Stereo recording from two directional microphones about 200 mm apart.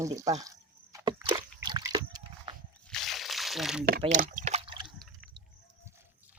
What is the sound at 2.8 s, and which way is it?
Crunch, centre (ahead or behind).